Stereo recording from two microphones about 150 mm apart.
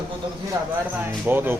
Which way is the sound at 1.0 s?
15° right (ahead or behind).